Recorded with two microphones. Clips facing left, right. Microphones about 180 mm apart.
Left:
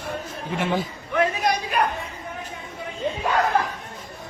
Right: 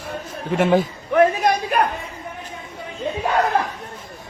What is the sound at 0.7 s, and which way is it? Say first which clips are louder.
A man's voice: right 7 dB; 50° right (ahead or behind).